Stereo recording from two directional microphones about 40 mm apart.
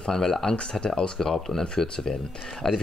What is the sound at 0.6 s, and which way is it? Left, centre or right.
Speech, left.